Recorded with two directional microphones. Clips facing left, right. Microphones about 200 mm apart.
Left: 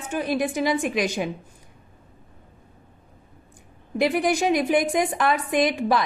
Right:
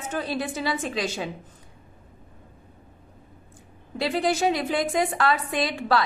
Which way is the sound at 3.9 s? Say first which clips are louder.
Left 3 dB; 15° left (ahead or behind).